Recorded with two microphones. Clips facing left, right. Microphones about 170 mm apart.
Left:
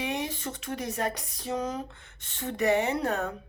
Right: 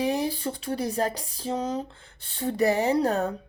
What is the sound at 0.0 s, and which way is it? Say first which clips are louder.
Speech: right 6 dB; 35° right (ahead or behind).